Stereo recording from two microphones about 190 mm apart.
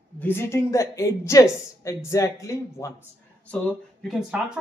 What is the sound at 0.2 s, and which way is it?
Speech, 10° left (ahead or behind).